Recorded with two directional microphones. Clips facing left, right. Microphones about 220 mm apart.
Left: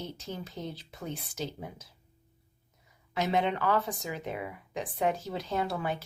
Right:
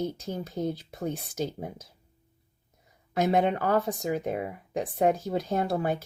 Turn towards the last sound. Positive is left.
turn(degrees=-45)  # may be behind; listen again after turning